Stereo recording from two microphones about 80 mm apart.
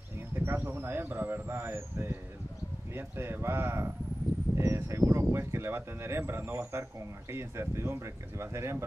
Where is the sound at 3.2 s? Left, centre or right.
Right.